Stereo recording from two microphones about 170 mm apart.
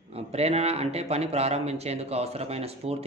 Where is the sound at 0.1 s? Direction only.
40° right (ahead or behind).